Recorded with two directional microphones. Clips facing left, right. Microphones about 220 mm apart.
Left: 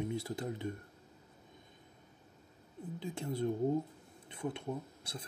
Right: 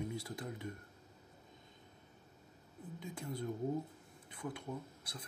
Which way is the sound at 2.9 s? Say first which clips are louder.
Left 6 dB; 30° left (ahead or behind).